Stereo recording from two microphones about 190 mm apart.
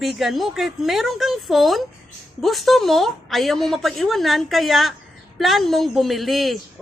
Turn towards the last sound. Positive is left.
turn(degrees=0)  # may be behind; listen again after turning